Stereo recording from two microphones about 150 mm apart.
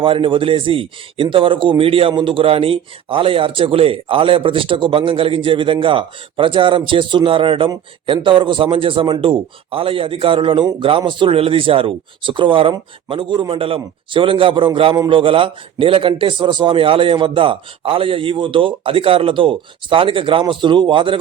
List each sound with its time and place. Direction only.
0.0 s speech: 35° right (ahead or behind)